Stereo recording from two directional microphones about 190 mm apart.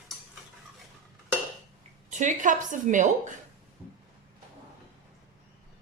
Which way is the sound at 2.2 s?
40° right (ahead or behind).